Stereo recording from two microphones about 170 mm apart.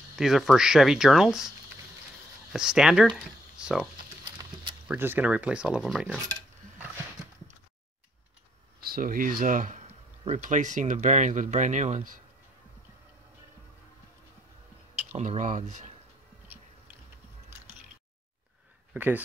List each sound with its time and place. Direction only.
0.1 s speech: centre (ahead or behind)
2.5 s speech: 5° right (ahead or behind)
4.8 s speech: 10° right (ahead or behind)
8.8 s speech: 60° right (ahead or behind)
15.1 s speech: 45° right (ahead or behind)
18.9 s speech: 10° right (ahead or behind)